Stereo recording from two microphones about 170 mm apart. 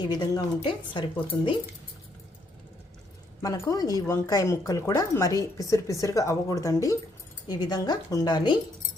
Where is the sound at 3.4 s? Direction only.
20° left (ahead or behind).